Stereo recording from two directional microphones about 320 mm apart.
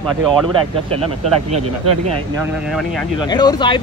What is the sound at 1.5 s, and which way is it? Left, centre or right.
Speech, right.